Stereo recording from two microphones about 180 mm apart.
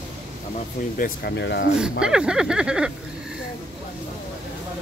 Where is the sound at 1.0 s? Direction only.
70° left (ahead or behind).